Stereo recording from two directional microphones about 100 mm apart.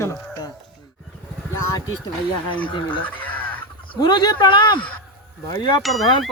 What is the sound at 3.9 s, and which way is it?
Speech, 45° left (ahead or behind).